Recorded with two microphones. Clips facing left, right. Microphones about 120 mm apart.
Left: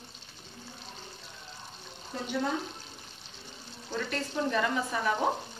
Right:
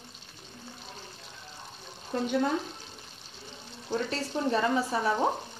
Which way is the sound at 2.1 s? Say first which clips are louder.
Right 8 dB; 55° right (ahead or behind).